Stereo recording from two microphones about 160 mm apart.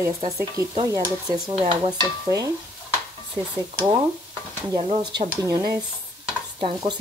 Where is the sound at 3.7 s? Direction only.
25° right (ahead or behind).